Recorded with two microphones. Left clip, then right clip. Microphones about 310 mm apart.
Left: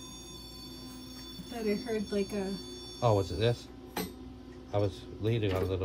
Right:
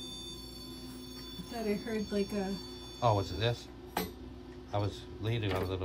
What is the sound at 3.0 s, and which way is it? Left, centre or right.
Speech, right.